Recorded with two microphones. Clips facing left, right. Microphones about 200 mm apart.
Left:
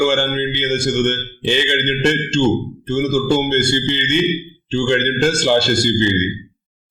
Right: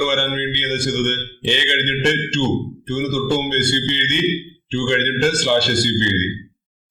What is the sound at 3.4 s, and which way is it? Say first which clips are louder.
A man's voice: left 3 dB; 40° left (ahead or behind).